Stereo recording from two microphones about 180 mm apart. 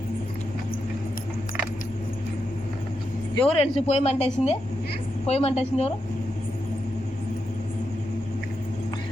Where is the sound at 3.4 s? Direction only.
30° left (ahead or behind).